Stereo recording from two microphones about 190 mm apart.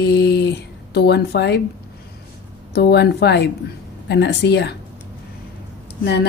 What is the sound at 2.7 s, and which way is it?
Speech, 60° left (ahead or behind).